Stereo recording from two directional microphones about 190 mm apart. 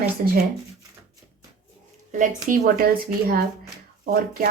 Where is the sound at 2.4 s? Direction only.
50° right (ahead or behind).